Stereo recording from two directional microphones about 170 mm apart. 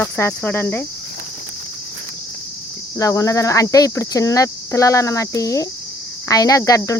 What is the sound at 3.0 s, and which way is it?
Speech, 20° left (ahead or behind).